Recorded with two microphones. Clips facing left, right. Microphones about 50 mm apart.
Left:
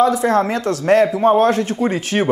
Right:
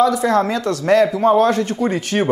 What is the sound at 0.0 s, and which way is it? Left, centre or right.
Speech, left.